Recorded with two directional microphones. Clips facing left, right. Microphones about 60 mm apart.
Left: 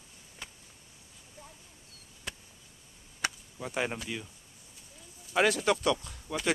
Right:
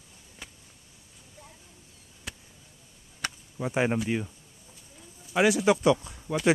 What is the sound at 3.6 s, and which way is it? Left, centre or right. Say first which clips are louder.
Speech: right 7 dB; centre.